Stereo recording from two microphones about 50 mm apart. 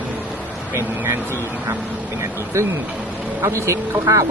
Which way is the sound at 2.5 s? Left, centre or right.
Right.